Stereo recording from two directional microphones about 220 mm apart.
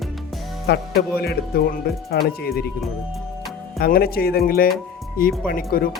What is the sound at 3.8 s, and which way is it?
Speech, 45° left (ahead or behind).